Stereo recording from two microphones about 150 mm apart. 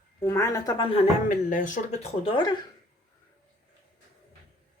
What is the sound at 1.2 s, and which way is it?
Speech, 60° left (ahead or behind).